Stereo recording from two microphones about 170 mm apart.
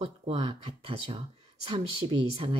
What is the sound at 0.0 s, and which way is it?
Speech, 35° right (ahead or behind).